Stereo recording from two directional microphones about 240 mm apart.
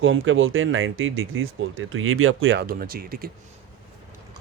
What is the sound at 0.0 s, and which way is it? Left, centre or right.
Speech, right.